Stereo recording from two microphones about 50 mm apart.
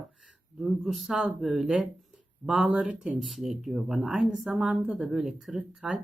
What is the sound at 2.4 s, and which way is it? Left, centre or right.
Speech, centre.